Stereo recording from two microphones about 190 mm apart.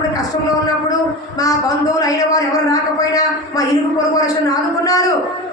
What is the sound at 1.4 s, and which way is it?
A man's voice, 20° left (ahead or behind).